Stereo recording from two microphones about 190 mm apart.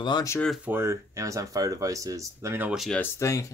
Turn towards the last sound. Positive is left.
turn(degrees=15)  # may be behind; listen again after turning